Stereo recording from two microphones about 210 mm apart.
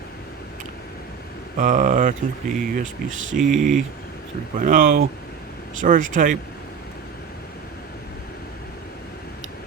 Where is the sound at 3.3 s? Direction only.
40° right (ahead or behind).